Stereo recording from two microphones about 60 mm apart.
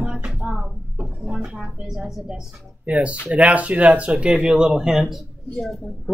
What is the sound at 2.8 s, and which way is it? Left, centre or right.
Speech, right.